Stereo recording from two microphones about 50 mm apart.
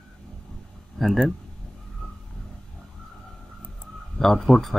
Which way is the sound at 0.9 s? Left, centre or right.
Centre.